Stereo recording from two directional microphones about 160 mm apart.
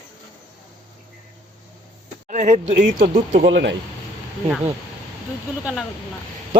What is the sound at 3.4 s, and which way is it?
Speech, 90° right.